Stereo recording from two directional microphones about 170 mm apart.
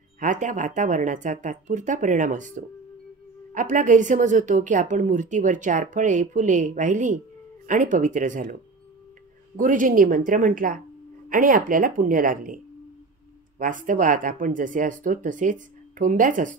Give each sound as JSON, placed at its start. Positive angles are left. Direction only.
{"t": 0.2, "sound": "a woman's voice", "side_deg": -50}
{"t": 9.6, "sound": "a woman's voice", "side_deg": -50}
{"t": 13.6, "sound": "a woman's voice", "side_deg": -50}